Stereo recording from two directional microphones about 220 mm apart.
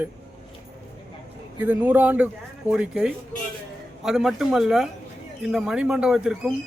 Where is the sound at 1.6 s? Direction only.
10° right (ahead or behind).